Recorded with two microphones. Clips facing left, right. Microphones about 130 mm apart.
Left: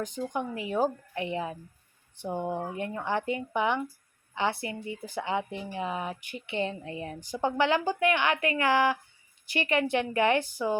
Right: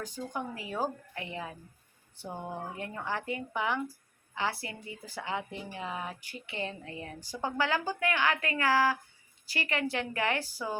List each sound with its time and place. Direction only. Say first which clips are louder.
0.0 s speech: left 5 dB; 20° left (ahead or behind)